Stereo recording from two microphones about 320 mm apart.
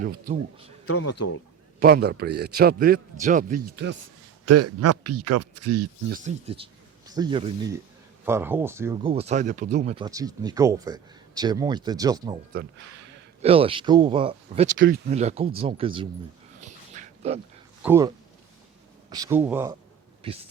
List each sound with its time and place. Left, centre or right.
0.9 s speech: left
1.8 s a man's voice: right
4.4 s speech: right
6.1 s speech: right
13.4 s speech: centre
16.6 s dog: right
17.8 s speech: centre
19.1 s speech: centre
20.2 s speech: centre